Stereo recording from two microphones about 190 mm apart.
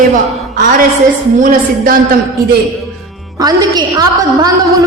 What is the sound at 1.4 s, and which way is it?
Speech, 45° right (ahead or behind).